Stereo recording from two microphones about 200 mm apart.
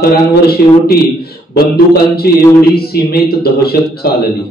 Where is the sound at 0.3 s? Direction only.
50° left (ahead or behind).